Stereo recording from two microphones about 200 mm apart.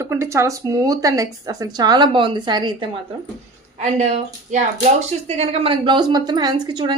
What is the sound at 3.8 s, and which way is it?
A woman's voice, 35° right (ahead or behind).